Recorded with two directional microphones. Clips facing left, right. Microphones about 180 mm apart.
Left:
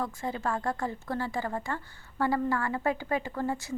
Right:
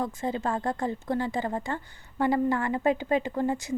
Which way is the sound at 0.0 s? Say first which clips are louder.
Right 3 dB; 20° right (ahead or behind).